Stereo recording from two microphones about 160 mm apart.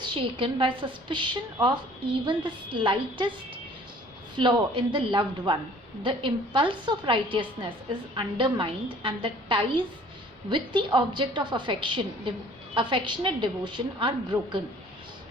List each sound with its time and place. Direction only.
0.0 s a woman's voice: 30° right (ahead or behind)
4.4 s a woman's voice: 30° right (ahead or behind)